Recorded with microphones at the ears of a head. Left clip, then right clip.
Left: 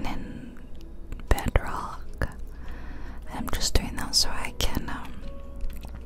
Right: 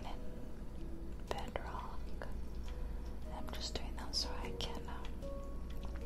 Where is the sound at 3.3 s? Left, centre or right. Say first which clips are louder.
Left 15 dB; left.